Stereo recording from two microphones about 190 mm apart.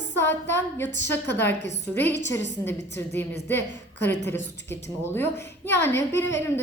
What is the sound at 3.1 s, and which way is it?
A woman's voice, 10° left (ahead or behind).